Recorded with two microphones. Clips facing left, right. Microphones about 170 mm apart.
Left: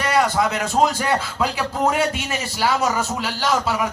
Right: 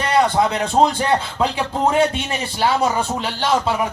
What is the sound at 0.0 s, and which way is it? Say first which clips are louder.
Speech: right 2 dB; 30° right (ahead or behind).